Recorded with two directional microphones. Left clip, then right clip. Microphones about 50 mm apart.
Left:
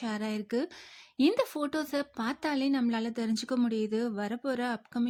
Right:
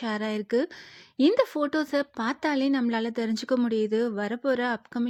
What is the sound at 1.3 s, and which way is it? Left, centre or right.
Speech, right.